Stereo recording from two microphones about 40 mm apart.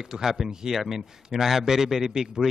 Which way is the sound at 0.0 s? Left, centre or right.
Centre.